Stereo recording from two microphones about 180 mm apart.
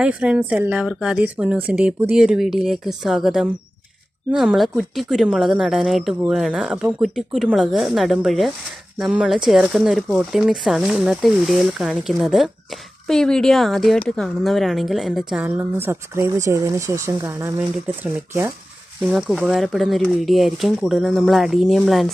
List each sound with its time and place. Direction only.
0.0 s a woman's voice: 5° right (ahead or behind)